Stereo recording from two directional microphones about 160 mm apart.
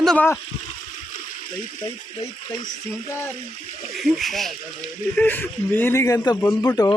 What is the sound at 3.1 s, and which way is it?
Speech, 15° left (ahead or behind).